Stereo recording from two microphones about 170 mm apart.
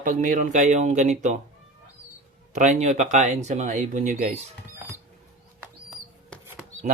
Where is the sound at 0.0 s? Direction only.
50° right (ahead or behind).